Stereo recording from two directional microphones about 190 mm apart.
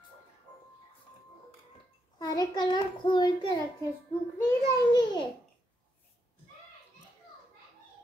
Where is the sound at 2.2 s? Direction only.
20° left (ahead or behind).